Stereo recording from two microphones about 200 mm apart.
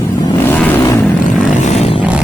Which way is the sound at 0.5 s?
10° left (ahead or behind).